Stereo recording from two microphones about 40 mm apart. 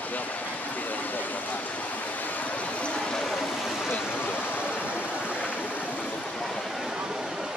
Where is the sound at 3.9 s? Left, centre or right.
Left.